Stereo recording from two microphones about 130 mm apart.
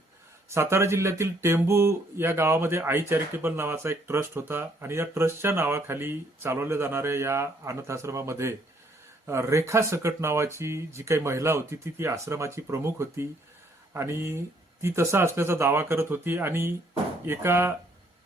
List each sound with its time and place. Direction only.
0.5 s speech: 20° right (ahead or behind)